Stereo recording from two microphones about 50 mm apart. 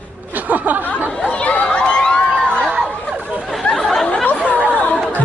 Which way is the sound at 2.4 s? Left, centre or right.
Centre.